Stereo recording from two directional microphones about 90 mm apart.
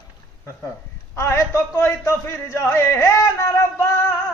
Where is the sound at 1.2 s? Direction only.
30° left (ahead or behind).